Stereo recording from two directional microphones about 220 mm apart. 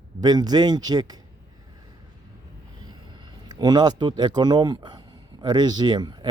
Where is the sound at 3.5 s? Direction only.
20° right (ahead or behind).